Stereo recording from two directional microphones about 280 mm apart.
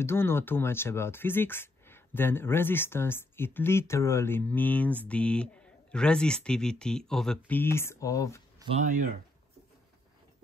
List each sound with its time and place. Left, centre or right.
0.0 s speech: centre
8.5 s speech: right